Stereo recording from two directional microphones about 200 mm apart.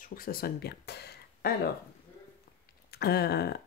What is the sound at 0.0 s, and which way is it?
Speech, 45° left (ahead or behind).